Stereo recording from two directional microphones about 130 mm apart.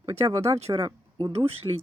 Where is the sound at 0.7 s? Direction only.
30° right (ahead or behind).